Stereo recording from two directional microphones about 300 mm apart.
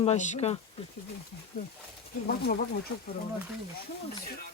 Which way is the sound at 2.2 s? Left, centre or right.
Left.